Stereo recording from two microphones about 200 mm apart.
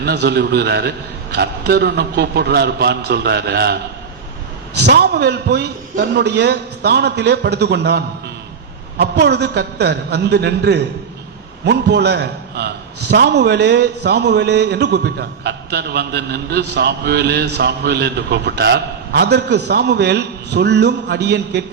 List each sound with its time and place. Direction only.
0.0 s a man's voice: 55° right (ahead or behind)
4.8 s a man's voice: 55° right (ahead or behind)